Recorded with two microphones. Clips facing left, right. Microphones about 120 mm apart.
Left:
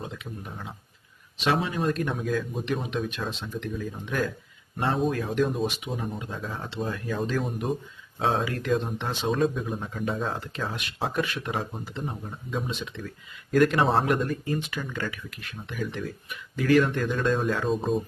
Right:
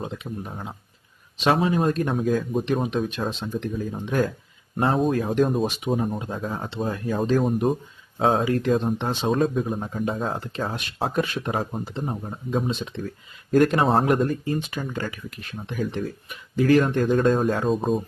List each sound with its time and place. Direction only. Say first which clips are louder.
0.0 s speech: right 5 dB; 25° right (ahead or behind)
1.5 s speech: right 5 dB; 40° right (ahead or behind)
3.1 s speech: right 5 dB; 30° right (ahead or behind)